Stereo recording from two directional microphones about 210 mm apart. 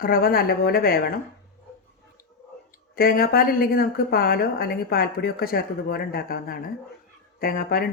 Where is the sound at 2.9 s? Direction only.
45° left (ahead or behind).